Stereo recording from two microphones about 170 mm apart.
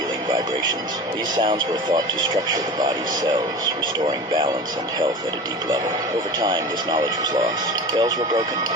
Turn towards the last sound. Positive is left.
turn(degrees=-25)  # may be behind; listen again after turning